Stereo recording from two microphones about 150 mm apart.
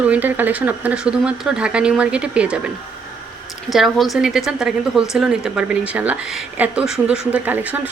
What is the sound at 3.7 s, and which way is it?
A woman's voice, centre (ahead or behind).